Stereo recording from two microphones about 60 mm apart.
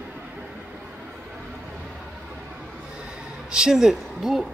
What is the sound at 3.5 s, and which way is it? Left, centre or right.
Speech, centre.